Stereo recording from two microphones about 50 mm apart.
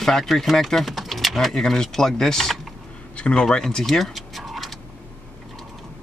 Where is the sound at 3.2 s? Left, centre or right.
Left.